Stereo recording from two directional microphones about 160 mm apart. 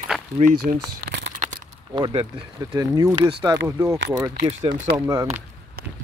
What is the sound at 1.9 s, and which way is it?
Speech, 30° right (ahead or behind).